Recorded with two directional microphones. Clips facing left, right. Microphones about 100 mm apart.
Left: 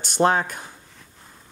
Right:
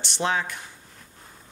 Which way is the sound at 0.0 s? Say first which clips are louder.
Left 6 dB; 45° left (ahead or behind).